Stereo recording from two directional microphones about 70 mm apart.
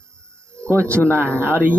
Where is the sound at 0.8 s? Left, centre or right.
Centre.